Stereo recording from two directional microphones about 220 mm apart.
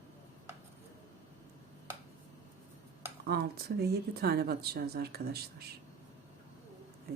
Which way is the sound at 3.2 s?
45° right (ahead or behind).